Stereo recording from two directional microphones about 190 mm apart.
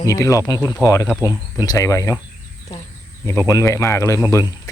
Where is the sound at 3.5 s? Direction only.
15° left (ahead or behind).